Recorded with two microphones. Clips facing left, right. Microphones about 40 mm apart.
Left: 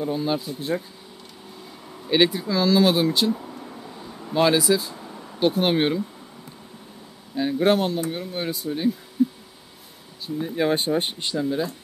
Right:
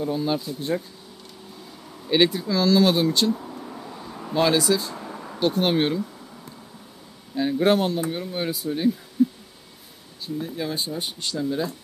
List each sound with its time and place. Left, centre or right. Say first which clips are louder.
0.0 s speech: even; centre
1.9 s a sound: even; centre
4.3 s speech: left 1 dB; centre
4.9 s a sound: right 3 dB; right
5.4 s speech: left 1 dB; centre
7.3 s speech: even; centre
9.2 s a sound: right 1 dB; centre
10.5 s speech: left 11 dB; left
11.1 s speech: left 2 dB; centre